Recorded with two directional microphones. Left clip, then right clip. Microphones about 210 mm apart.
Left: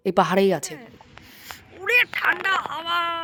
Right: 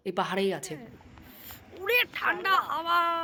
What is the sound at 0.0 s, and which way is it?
Speech, 55° left (ahead or behind).